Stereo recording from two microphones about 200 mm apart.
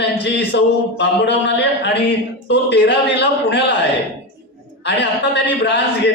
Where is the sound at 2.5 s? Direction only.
60° left (ahead or behind).